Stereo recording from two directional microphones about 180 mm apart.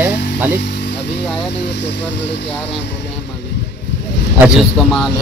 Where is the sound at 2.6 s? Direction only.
75° left (ahead or behind).